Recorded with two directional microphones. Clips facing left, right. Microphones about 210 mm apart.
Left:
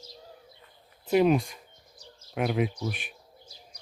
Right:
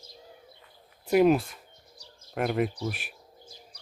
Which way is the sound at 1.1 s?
5° right (ahead or behind).